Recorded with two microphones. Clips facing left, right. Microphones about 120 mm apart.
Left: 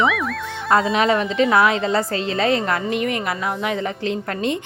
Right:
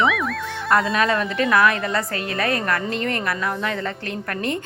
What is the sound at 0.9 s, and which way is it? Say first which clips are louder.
A woman's voice: left 3 dB; 20° left (ahead or behind).